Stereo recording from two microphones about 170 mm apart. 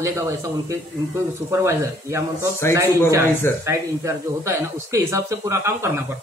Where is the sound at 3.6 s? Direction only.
15° right (ahead or behind).